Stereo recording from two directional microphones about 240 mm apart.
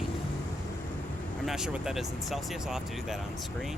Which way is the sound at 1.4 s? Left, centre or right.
Centre.